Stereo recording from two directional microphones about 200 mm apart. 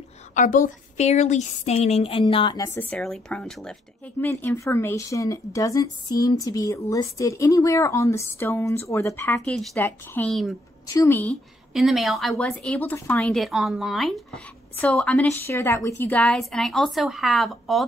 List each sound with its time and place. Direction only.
0.3 s speech: 40° left (ahead or behind); by 10.5 s 5° left (ahead or behind)
10.9 s speech: 15° left (ahead or behind)
11.7 s a woman's voice: centre (ahead or behind)